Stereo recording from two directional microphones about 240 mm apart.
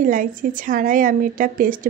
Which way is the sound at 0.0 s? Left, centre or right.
Right.